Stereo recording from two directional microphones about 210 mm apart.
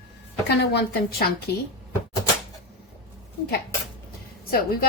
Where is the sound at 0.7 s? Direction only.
45° left (ahead or behind).